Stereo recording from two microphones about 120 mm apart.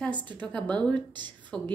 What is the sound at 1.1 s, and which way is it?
Speech, 40° right (ahead or behind).